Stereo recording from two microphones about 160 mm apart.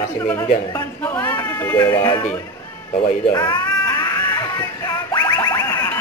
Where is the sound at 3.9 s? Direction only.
15° left (ahead or behind).